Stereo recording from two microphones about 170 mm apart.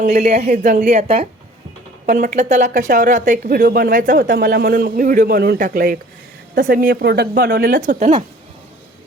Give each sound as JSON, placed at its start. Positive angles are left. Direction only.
{"t": 0.0, "sound": "speech", "side_deg": -40}
{"t": 2.0, "sound": "speech", "side_deg": -50}